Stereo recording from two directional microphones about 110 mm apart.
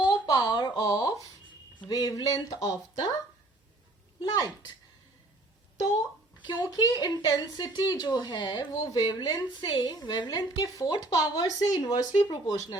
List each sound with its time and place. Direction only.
0.0 s a sound: 40° left (ahead or behind)
1.9 s a woman's voice: 35° left (ahead or behind)
4.2 s a woman's voice: 40° left (ahead or behind)
6.4 s a woman's voice: 45° left (ahead or behind)